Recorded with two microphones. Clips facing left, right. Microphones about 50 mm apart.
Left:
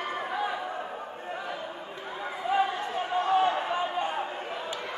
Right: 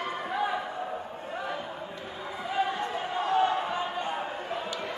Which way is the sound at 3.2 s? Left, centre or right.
Centre.